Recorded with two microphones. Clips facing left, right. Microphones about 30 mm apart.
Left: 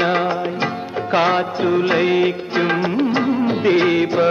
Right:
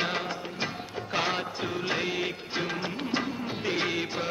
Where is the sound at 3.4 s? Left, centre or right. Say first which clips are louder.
Left 16 dB; left.